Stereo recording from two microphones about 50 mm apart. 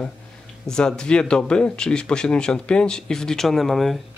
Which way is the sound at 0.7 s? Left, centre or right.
Centre.